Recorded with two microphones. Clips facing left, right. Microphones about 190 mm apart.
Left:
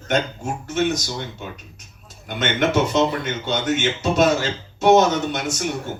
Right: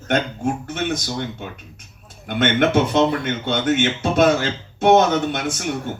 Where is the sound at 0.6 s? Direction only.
55° right (ahead or behind).